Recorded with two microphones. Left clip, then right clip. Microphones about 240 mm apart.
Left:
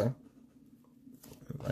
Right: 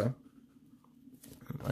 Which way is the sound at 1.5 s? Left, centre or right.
Centre.